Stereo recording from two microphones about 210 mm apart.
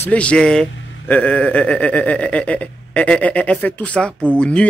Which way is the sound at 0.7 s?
65° left (ahead or behind).